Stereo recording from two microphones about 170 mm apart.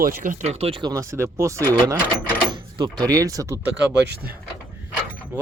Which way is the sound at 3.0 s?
20° right (ahead or behind).